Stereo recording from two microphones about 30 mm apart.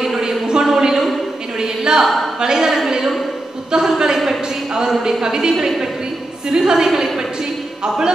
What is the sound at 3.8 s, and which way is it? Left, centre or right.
A woman's voice, centre.